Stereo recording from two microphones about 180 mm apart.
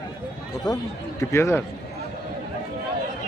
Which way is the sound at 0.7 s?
20° left (ahead or behind).